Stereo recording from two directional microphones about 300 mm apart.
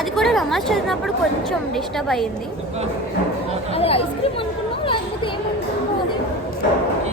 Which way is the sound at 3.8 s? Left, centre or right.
Centre.